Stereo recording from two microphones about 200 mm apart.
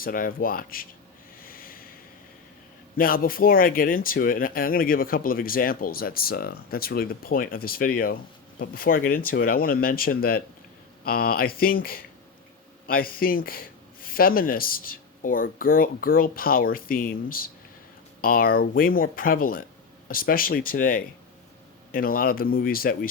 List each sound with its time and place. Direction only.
0.0 s speech: 45° left (ahead or behind)
1.4 s a sound: 45° left (ahead or behind)
3.0 s speech: 45° left (ahead or behind)